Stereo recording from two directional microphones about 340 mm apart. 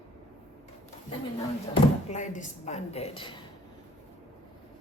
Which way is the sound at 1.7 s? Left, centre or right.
Centre.